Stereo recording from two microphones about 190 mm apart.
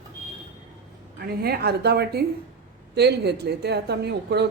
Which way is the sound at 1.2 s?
55° right (ahead or behind).